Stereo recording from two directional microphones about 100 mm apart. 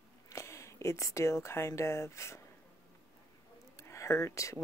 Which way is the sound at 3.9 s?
30° left (ahead or behind).